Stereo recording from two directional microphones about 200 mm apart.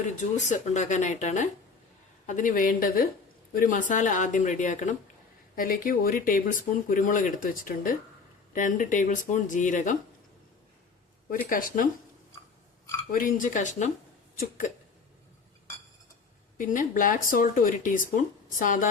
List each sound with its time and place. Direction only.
0.3 s speech: 35° left (ahead or behind)
11.3 s speech: 45° left (ahead or behind)
13.1 s speech: 45° left (ahead or behind)
16.6 s speech: 40° left (ahead or behind)